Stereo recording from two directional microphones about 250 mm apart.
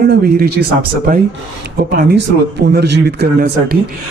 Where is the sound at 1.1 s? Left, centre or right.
Right.